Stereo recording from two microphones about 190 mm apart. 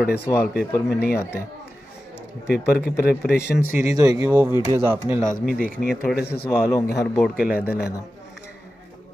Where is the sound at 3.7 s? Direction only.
15° right (ahead or behind).